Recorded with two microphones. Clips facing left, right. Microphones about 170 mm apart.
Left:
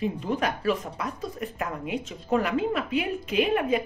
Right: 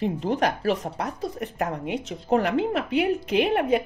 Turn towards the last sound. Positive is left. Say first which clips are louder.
# right 2 dB
turn(degrees=-70)  # may be behind; listen again after turning